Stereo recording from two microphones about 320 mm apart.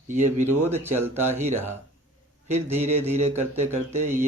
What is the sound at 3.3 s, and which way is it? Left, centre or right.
Speech, centre.